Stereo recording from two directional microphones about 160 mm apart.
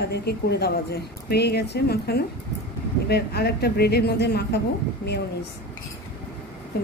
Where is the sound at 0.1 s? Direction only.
90° left.